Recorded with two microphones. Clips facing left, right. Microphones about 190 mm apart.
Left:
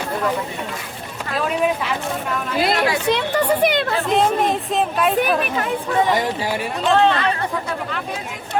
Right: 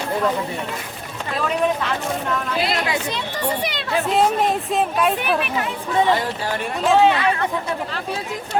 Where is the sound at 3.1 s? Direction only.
65° left (ahead or behind).